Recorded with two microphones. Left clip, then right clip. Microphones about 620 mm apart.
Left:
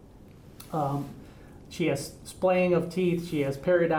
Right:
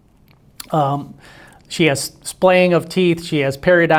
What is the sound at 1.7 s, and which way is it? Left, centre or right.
Speech, right.